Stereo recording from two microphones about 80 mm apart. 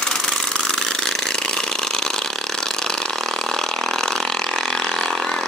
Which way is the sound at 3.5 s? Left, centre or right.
Centre.